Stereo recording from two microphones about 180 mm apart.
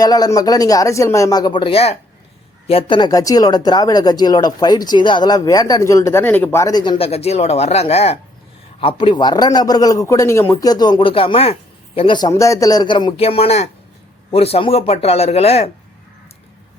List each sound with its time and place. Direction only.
0.0 s a man's voice: 20° left (ahead or behind)